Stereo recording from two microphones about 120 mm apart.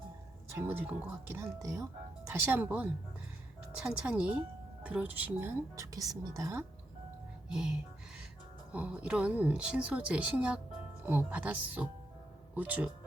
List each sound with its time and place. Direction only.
0.7 s speech: 15° right (ahead or behind)
2.3 s speech: 15° right (ahead or behind)
7.5 s speech: 5° right (ahead or behind)